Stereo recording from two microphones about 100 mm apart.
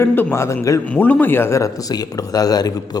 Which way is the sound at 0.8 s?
15° left (ahead or behind).